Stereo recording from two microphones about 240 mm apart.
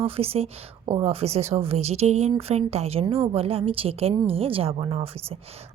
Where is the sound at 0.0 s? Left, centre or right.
Right.